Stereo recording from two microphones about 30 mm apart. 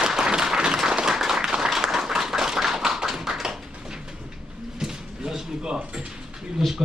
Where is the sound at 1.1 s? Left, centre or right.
Centre.